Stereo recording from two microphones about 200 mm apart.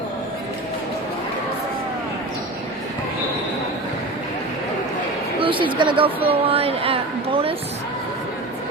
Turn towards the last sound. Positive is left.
turn(degrees=-30)  # may be behind; listen again after turning